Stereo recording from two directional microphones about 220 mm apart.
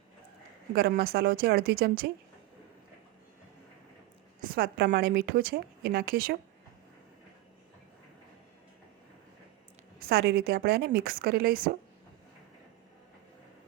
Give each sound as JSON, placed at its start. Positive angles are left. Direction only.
{"t": 0.7, "sound": "a woman's voice", "side_deg": -45}
{"t": 4.4, "sound": "a woman's voice", "side_deg": -40}
{"t": 10.0, "sound": "a woman's voice", "side_deg": -45}